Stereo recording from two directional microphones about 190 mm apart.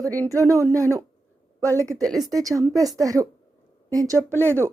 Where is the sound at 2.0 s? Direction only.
Centre (ahead or behind).